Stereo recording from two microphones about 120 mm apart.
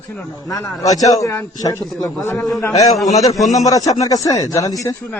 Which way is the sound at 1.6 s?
30° left (ahead or behind).